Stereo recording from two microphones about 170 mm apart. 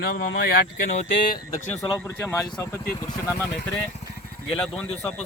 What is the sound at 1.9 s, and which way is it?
Speech, 10° left (ahead or behind).